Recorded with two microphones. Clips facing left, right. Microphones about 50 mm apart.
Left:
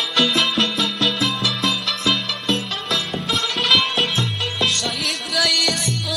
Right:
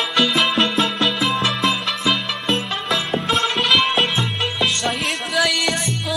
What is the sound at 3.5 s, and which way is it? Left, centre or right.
Music, centre.